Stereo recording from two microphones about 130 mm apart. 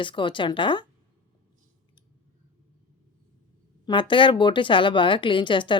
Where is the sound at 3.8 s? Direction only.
40° left (ahead or behind).